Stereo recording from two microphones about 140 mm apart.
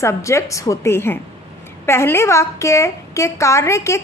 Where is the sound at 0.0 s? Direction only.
20° left (ahead or behind).